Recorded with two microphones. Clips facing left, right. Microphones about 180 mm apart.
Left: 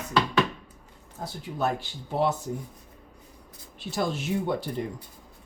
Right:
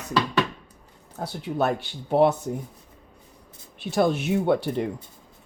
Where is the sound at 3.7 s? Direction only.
60° right (ahead or behind).